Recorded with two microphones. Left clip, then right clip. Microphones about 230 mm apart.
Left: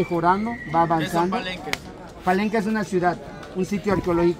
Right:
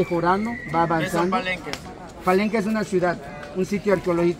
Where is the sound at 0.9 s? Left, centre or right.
Centre.